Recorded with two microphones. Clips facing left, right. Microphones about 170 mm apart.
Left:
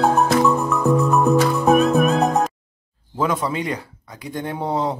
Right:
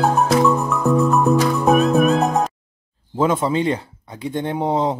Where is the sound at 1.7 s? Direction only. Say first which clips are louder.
Right 1 dB; centre (ahead or behind).